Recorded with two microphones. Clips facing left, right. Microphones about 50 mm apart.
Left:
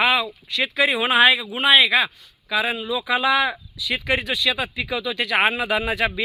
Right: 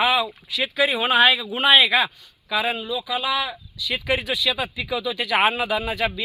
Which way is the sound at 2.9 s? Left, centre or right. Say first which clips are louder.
Left 4 dB; centre.